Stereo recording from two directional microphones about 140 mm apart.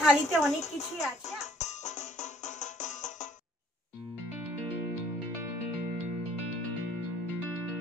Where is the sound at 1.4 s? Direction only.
55° left (ahead or behind).